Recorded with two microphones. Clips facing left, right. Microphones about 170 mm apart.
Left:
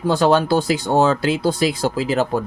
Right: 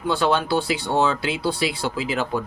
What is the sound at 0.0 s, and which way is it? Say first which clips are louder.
Speech: left 5 dB; 40° left (ahead or behind).